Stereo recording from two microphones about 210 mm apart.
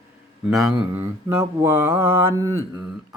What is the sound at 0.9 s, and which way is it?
Mantra, 10° right (ahead or behind).